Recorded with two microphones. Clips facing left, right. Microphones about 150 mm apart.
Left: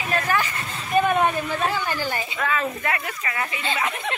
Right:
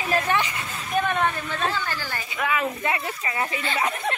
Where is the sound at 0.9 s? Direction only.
10° left (ahead or behind).